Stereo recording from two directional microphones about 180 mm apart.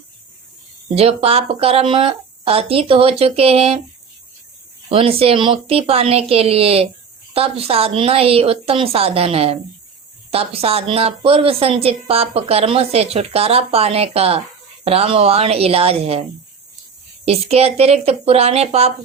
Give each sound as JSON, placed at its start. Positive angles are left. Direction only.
{"t": 0.9, "sound": "a woman's voice", "side_deg": -35}
{"t": 4.9, "sound": "a woman's voice", "side_deg": -30}
{"t": 17.2, "sound": "a woman's voice", "side_deg": -35}